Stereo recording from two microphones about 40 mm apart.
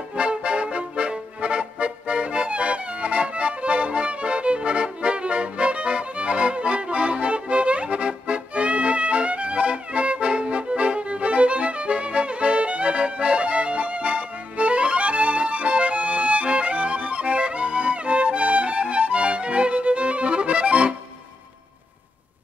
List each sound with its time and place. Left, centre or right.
0.1 s music: right